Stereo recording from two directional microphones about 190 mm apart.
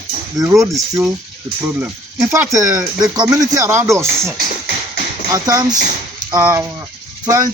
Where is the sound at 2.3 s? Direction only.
15° right (ahead or behind).